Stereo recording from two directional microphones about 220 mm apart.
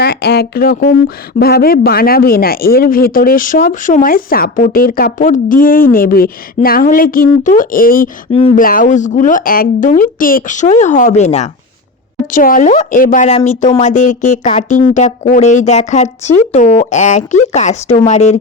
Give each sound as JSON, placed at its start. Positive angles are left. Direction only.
{"t": 0.0, "sound": "speech", "side_deg": 45}
{"t": 8.3, "sound": "speech", "side_deg": 30}